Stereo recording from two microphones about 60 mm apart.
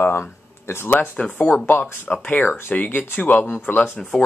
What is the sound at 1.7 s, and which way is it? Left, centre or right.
Speech, left.